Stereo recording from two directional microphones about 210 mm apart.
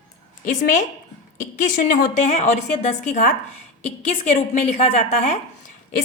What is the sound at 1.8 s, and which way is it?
Speech, 40° left (ahead or behind).